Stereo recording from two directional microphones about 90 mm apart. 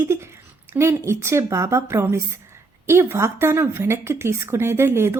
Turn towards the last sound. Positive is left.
turn(degrees=-30)  # may be behind; listen again after turning